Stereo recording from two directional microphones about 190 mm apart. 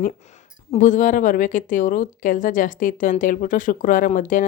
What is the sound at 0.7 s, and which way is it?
Speech, 40° left (ahead or behind).